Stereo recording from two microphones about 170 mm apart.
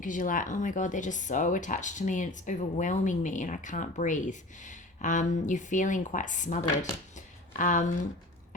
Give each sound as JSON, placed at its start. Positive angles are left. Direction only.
{"t": 0.0, "sound": "speech", "side_deg": 50}